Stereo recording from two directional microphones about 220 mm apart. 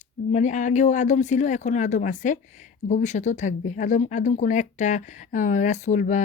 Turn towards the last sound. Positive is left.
turn(degrees=35)  # may be behind; listen again after turning